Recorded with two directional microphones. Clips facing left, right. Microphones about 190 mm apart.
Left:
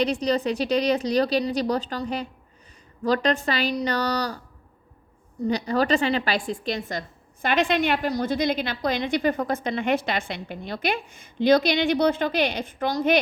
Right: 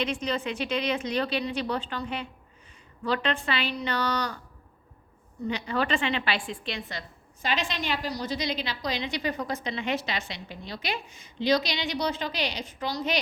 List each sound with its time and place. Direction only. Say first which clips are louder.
0.0 s a woman's voice: left 6 dB; 35° left (ahead or behind)
5.5 s a woman's voice: left 6 dB; 40° left (ahead or behind)
7.4 s a woman's voice: left 8 dB; 55° left (ahead or behind)